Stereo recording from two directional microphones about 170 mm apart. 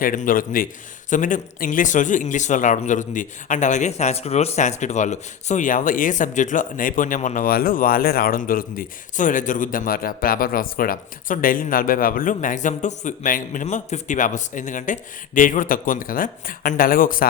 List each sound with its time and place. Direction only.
0.0 s a man's voice: 55° left (ahead or behind)